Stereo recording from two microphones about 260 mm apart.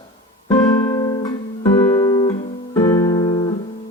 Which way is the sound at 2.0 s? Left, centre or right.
Centre.